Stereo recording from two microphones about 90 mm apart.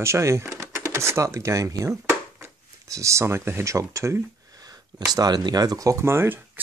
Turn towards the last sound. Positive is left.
turn(degrees=-30)  # may be behind; listen again after turning